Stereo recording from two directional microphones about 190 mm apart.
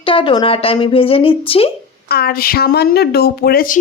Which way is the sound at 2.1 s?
55° left (ahead or behind).